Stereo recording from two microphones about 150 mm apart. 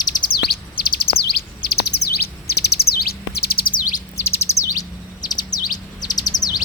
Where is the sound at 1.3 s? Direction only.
90° left; by 4.0 s 65° left (ahead or behind).